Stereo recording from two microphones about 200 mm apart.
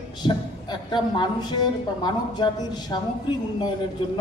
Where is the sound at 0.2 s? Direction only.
20° left (ahead or behind).